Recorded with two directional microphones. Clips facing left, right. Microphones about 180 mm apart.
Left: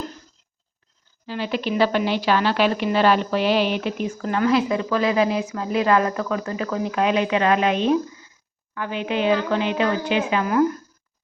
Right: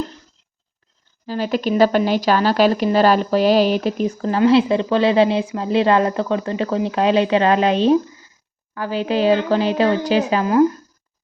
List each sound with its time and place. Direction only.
1.3 s speech: 40° right (ahead or behind)